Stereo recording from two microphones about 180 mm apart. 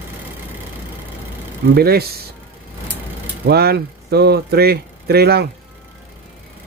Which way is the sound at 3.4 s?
60° right (ahead or behind).